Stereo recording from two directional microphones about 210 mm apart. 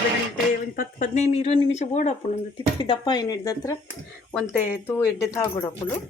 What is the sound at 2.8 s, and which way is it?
Speech, 20° left (ahead or behind).